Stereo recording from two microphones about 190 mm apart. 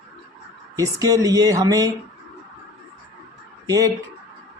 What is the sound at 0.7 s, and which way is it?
Speech, 20° right (ahead or behind).